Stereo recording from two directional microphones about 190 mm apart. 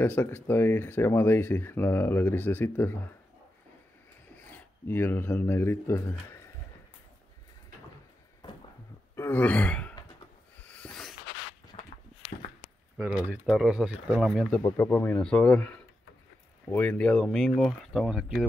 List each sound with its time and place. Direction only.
0.0 s speech: 10° left (ahead or behind)
4.5 s speech: 10° left (ahead or behind)
9.1 s sigh: 10° left (ahead or behind)
10.7 s a sound: 5° left (ahead or behind)
11.7 s walk: 30° left (ahead or behind)
12.9 s speech: 5° right (ahead or behind)
14.8 s speech: 10° left (ahead or behind)